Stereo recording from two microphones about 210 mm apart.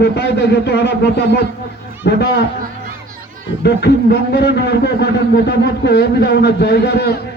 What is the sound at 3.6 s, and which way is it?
A man's voice, 50° left (ahead or behind).